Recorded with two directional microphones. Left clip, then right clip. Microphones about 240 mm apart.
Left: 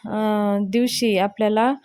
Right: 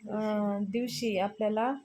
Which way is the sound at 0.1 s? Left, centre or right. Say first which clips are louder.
Left 10 dB; left.